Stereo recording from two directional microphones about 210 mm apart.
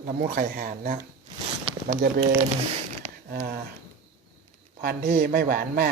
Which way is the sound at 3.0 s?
45° right (ahead or behind).